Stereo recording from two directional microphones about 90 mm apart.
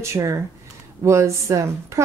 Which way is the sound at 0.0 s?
35° right (ahead or behind).